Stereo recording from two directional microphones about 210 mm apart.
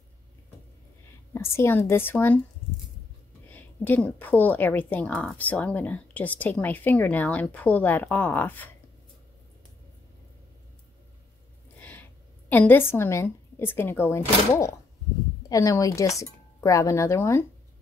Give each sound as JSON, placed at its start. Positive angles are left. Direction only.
{"t": 1.3, "sound": "a woman's voice", "side_deg": 10}
{"t": 3.4, "sound": "a woman's voice", "side_deg": 10}
{"t": 11.8, "sound": "a woman's voice", "side_deg": 10}